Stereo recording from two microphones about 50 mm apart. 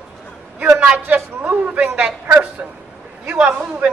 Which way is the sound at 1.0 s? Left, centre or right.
Right.